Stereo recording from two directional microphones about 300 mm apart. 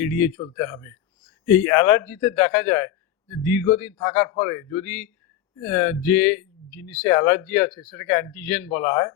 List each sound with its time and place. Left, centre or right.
0.0 s a man's voice: centre